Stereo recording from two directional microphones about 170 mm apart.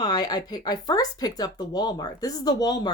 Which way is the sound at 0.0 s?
25° left (ahead or behind).